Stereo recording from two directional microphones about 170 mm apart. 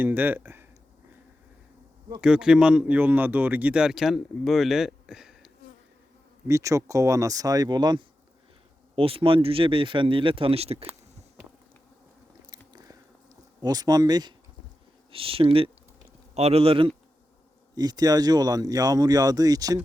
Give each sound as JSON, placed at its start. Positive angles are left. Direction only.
{"t": 0.0, "sound": "speech", "side_deg": -10}
{"t": 2.2, "sound": "a man's voice", "side_deg": -5}
{"t": 6.5, "sound": "speech", "side_deg": -20}
{"t": 12.5, "sound": "biting", "side_deg": -20}
{"t": 13.6, "sound": "speech", "side_deg": -20}